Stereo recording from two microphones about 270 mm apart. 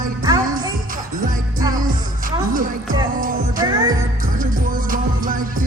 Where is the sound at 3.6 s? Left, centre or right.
Centre.